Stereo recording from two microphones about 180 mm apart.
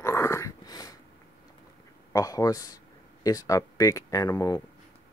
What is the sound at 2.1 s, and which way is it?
Speech, 20° left (ahead or behind).